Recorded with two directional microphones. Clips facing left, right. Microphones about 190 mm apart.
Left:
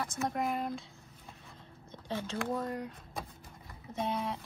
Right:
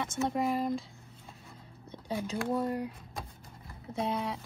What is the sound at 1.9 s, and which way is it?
Speech, 10° right (ahead or behind).